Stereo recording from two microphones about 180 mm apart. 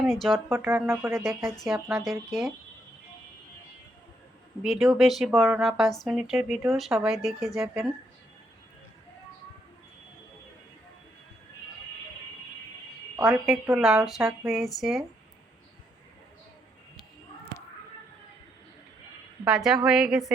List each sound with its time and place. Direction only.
0.0 s speech: centre (ahead or behind)
0.3 s speech: 10° right (ahead or behind)
1.1 s speech: centre (ahead or behind)
4.6 s speech: centre (ahead or behind)
13.7 s speech: 5° right (ahead or behind)
19.5 s speech: centre (ahead or behind)